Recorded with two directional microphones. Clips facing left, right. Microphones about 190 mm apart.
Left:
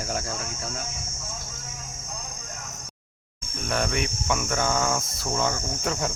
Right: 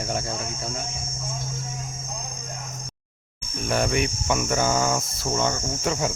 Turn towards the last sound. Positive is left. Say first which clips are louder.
# right 3 dB
turn(degrees=0)  # may be behind; listen again after turning